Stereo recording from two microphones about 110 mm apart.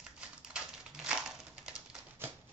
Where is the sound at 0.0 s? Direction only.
5° right (ahead or behind).